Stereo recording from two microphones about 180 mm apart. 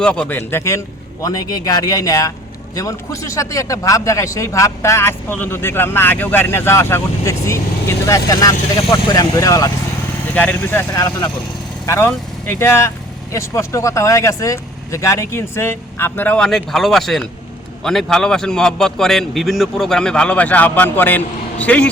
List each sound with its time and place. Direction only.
0.0 s a man's voice: 5° left (ahead or behind)
10.9 s a man's voice: 25° left (ahead or behind)
12.0 s a man's voice: 10° left (ahead or behind)